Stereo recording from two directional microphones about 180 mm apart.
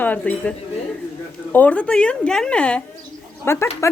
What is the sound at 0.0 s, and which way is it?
Speech, 10° left (ahead or behind).